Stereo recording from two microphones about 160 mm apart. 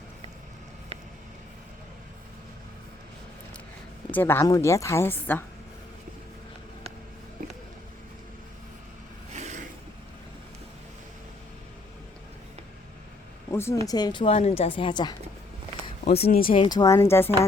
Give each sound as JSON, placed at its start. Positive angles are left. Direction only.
{"t": 4.1, "sound": "a woman's voice", "side_deg": 15}
{"t": 13.5, "sound": "a woman's voice", "side_deg": 15}
{"t": 16.4, "sound": "speech", "side_deg": 35}